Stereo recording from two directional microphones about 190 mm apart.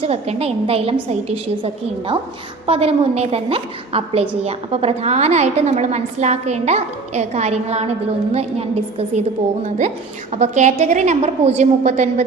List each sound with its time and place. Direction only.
0.0 s a woman's voice: 30° right (ahead or behind)
2.6 s a woman's voice: 30° right (ahead or behind)